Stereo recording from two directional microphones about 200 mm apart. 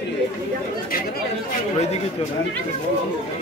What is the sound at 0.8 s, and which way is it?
Chatter, 45° left (ahead or behind).